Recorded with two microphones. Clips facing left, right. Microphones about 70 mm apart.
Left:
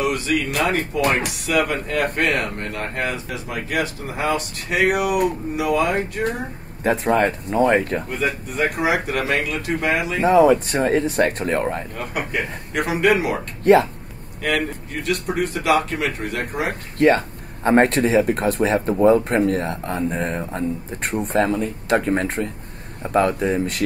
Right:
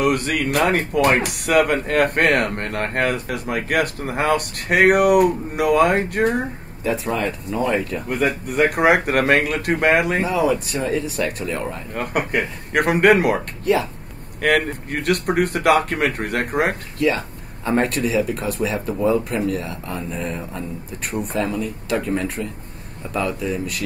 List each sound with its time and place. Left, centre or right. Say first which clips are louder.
0.0 s speech: right 2 dB; right
6.8 s speech: left 4 dB; left
8.1 s speech: right 3 dB; right
10.2 s speech: left 6 dB; left
11.9 s speech: right 4 dB; right
14.4 s speech: right 4 dB; right
17.6 s speech: left 4 dB; left